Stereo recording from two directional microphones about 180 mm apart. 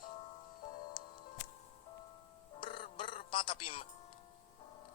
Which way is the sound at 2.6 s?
30° left (ahead or behind).